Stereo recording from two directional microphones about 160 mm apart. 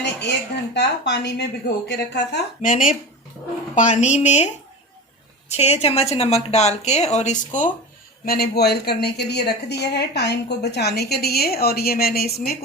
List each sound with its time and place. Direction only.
0.0 s a woman's voice: 90° left
2.6 s a woman's voice: 50° left (ahead or behind)
5.5 s a woman's voice: 40° left (ahead or behind)
8.2 s a woman's voice: 75° left (ahead or behind)